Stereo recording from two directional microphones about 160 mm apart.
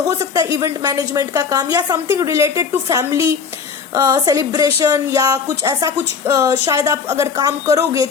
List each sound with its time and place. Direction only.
0.1 s speech: 20° right (ahead or behind)